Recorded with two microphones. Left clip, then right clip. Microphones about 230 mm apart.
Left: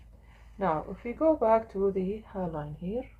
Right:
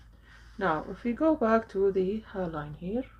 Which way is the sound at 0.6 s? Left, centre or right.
Right.